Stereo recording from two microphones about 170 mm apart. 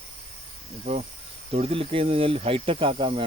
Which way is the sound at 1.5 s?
35° right (ahead or behind).